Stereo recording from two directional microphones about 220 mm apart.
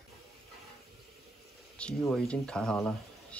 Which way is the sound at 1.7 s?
5° left (ahead or behind).